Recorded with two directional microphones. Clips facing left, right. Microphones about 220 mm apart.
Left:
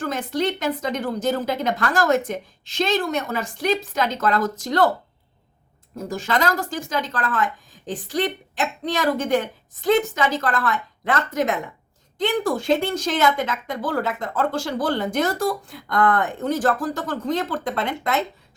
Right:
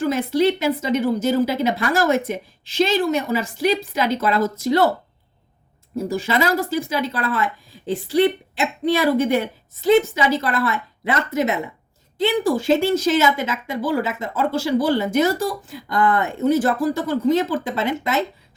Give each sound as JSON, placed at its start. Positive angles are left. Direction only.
{"t": 0.0, "sound": "speech", "side_deg": -10}
{"t": 6.0, "sound": "speech", "side_deg": -10}